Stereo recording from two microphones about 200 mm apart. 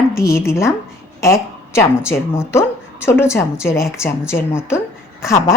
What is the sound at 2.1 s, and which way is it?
A woman's voice, 15° left (ahead or behind).